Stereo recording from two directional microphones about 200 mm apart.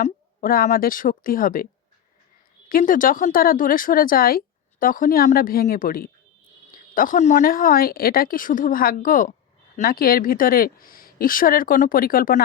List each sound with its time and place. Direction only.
0.0 s speech: 45° left (ahead or behind)
2.6 s speech: 45° left (ahead or behind)